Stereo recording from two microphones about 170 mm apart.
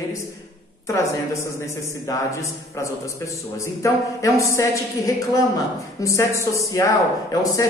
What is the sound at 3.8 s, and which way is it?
A woman's voice, 20° left (ahead or behind).